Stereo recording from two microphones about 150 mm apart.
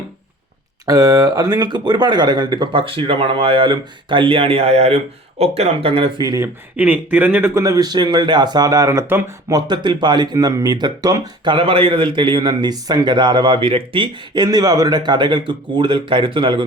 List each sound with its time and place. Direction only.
0.9 s speech: 25° right (ahead or behind)
6.7 s speech: 10° right (ahead or behind); by 16.6 s 35° right (ahead or behind)